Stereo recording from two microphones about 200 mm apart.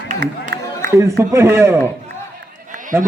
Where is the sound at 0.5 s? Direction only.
55° right (ahead or behind).